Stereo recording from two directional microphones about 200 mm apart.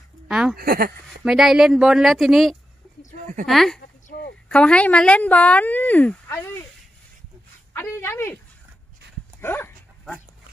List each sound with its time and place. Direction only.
0.3 s speech: 5° right (ahead or behind)
0.6 s speech: 45° right (ahead or behind)
1.2 s speech: centre (ahead or behind)
7.7 s speech: 10° left (ahead or behind)
9.0 s dog: 55° right (ahead or behind)
9.4 s dog: 10° left (ahead or behind)